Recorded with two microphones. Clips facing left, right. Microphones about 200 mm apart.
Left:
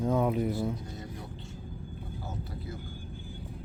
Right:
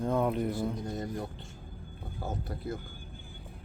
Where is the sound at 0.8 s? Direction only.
50° right (ahead or behind).